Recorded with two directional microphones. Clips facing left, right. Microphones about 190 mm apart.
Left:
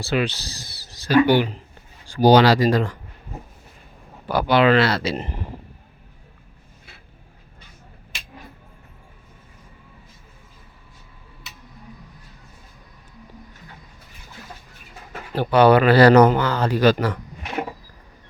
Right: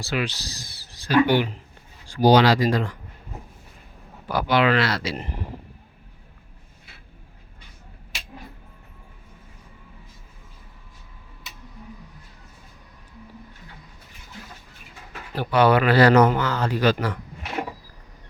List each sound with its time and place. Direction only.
0.1 s speech: 30° left (ahead or behind)
0.6 s a sound: 65° left (ahead or behind)
1.0 s speech: 40° left (ahead or behind)
4.3 s speech: 30° left (ahead or behind)
15.4 s speech: 30° left (ahead or behind)